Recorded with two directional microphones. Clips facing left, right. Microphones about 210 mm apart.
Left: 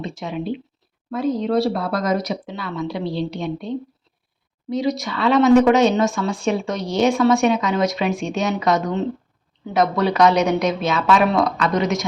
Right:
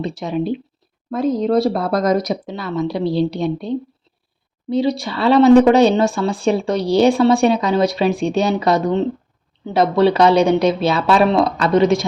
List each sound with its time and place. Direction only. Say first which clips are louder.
0.0 s a woman's voice: right 5 dB; 35° right (ahead or behind)